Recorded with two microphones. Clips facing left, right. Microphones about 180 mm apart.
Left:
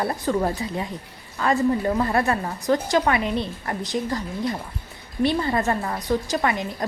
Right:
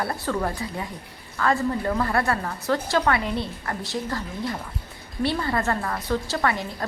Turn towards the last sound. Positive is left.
turn(degrees=15)  # may be behind; listen again after turning